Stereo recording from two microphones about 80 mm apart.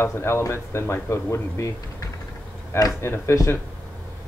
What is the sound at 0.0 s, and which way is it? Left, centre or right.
Speech, left.